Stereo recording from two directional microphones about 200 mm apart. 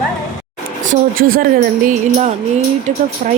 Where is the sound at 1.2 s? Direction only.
90° right.